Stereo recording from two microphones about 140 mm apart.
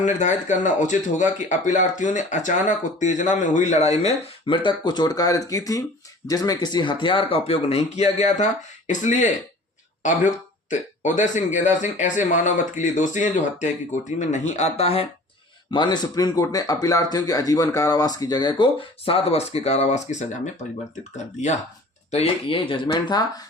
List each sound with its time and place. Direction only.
0.0 s speech: 60° left (ahead or behind)
10.7 s speech: 60° left (ahead or behind)
15.7 s speech: 30° left (ahead or behind); by 21.6 s 55° left (ahead or behind)
22.1 s speech: 45° left (ahead or behind)